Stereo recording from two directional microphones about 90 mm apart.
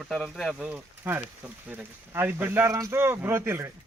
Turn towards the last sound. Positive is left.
turn(degrees=-25)  # may be behind; listen again after turning